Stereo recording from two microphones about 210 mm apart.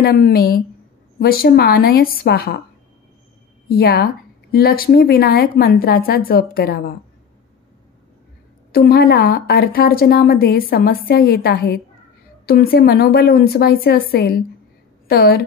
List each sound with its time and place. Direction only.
0.0 s a woman's voice: 45° left (ahead or behind)
3.6 s a woman's voice: 45° left (ahead or behind)
8.7 s a woman's voice: 45° left (ahead or behind)